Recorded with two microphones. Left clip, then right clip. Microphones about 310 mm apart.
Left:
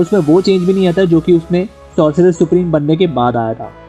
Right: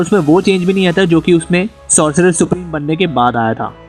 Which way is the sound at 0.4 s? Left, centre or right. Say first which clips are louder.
Left 1 dB; right.